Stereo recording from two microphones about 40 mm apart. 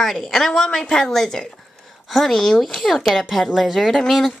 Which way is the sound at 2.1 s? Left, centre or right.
Centre.